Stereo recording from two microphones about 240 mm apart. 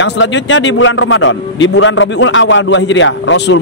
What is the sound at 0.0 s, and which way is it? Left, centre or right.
A man's voice, left.